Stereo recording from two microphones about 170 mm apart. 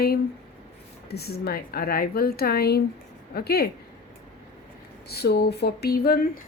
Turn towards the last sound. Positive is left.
turn(degrees=65)  # may be behind; listen again after turning